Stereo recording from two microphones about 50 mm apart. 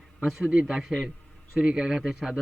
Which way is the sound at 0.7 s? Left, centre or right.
Centre.